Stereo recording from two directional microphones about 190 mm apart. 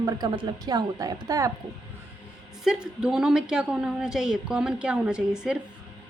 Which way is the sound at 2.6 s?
5° right (ahead or behind).